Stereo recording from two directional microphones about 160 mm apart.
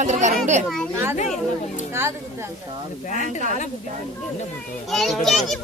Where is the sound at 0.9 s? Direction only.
15° right (ahead or behind).